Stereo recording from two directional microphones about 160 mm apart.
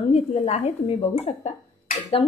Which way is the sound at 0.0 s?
40° left (ahead or behind).